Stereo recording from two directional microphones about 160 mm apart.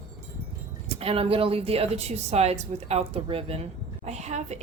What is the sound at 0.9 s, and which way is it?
A woman's voice, 40° right (ahead or behind).